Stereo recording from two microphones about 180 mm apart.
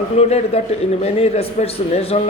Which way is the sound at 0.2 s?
35° left (ahead or behind).